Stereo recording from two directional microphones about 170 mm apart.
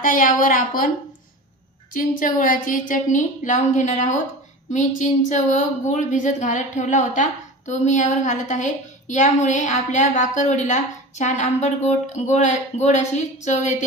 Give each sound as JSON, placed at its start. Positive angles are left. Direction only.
{"t": 0.0, "sound": "a woman's voice", "side_deg": 50}
{"t": 2.0, "sound": "a woman's voice", "side_deg": 50}